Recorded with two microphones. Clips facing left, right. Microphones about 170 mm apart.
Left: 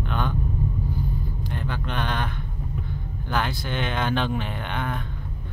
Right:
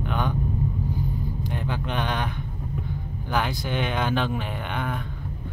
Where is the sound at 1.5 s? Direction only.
15° right (ahead or behind).